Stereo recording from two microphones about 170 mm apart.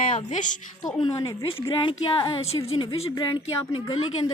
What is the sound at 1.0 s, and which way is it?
A woman's voice, 25° left (ahead or behind).